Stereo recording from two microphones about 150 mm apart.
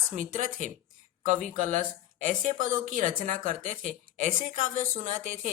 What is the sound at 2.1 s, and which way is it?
A woman's voice, 55° right (ahead or behind).